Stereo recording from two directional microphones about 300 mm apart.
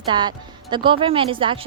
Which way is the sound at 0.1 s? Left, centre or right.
Centre.